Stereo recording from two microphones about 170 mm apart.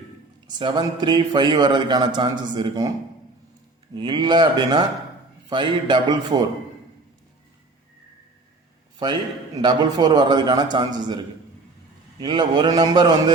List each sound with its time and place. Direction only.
0.4 s a man's voice: 25° right (ahead or behind)
3.9 s a man's voice: 25° right (ahead or behind)
9.0 s a man's voice: 25° right (ahead or behind)